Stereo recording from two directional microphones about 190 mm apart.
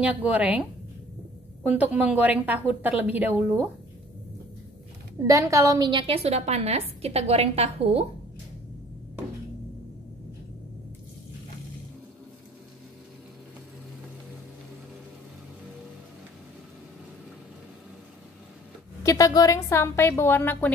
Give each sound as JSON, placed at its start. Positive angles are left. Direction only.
{"t": 0.0, "sound": "a woman's voice", "side_deg": -5}
{"t": 1.7, "sound": "a woman's voice", "side_deg": -10}
{"t": 5.2, "sound": "a woman's voice", "side_deg": -15}
{"t": 19.0, "sound": "a woman's voice", "side_deg": 20}